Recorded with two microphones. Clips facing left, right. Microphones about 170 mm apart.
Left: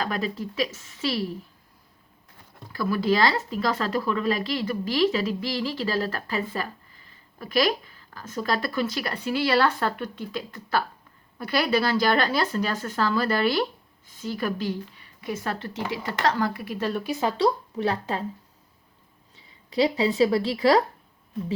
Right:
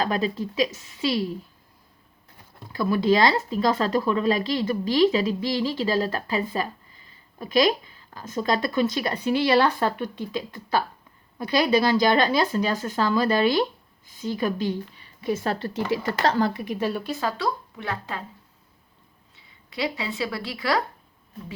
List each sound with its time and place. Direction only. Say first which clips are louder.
0.0 s speech: right 4 dB; 25° right (ahead or behind)
2.7 s speech: right 3 dB; 20° right (ahead or behind)
16.7 s speech: right 1 dB; 10° right (ahead or behind)
17.1 s speech: left 4 dB; 20° left (ahead or behind)
19.7 s speech: left 7 dB; 35° left (ahead or behind)